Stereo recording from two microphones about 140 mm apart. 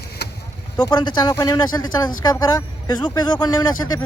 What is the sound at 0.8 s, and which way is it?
Speech, 35° left (ahead or behind).